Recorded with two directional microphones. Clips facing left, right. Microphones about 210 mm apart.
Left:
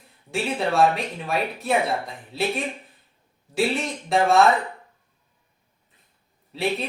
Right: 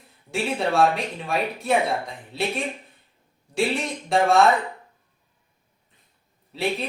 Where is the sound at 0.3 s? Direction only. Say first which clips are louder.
Even; centre (ahead or behind).